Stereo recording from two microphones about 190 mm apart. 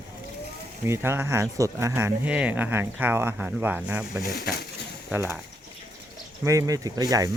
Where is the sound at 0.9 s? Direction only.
10° right (ahead or behind).